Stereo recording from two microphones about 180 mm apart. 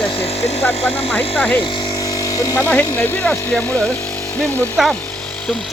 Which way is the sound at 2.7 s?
10° left (ahead or behind).